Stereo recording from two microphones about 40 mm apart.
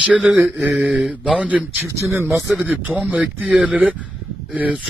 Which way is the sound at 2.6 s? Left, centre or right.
Right.